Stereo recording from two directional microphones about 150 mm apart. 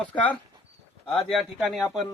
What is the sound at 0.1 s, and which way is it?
Speech, 10° left (ahead or behind).